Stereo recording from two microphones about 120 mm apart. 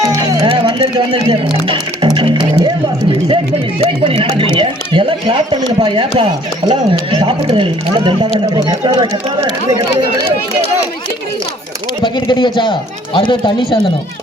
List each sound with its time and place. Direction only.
0.0 s music: 25° right (ahead or behind)
0.4 s speech: 45° right (ahead or behind)
1.6 s music: 45° right (ahead or behind)
4.0 s speech: 50° right (ahead or behind)
12.0 s speech: 40° left (ahead or behind)